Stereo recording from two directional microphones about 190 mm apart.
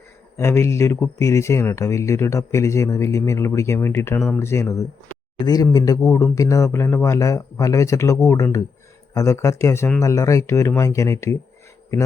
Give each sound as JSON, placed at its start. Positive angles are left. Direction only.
{"t": 0.3, "sound": "speech", "side_deg": 15}